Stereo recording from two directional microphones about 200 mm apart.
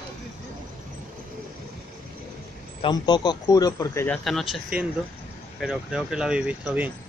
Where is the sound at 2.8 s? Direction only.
20° left (ahead or behind); by 6.9 s 5° right (ahead or behind).